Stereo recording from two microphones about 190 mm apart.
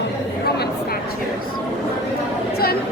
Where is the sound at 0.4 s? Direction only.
55° left (ahead or behind).